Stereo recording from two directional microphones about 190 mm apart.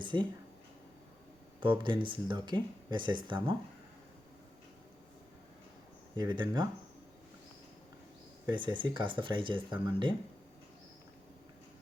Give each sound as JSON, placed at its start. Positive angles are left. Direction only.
{"t": 0.0, "sound": "a sound", "side_deg": -25}
{"t": 1.8, "sound": "speech", "side_deg": -25}
{"t": 6.1, "sound": "speech", "side_deg": -25}
{"t": 8.4, "sound": "speech", "side_deg": -25}